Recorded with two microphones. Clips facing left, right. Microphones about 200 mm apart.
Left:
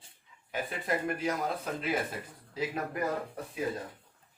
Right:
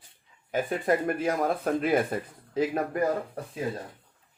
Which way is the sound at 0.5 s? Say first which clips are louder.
Right 7 dB; 50° right (ahead or behind).